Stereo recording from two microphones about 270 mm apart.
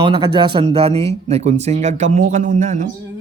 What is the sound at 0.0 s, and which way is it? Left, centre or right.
Speech, centre.